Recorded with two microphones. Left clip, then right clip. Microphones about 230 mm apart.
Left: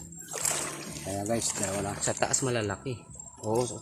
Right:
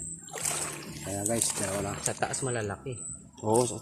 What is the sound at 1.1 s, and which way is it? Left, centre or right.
Speech, centre.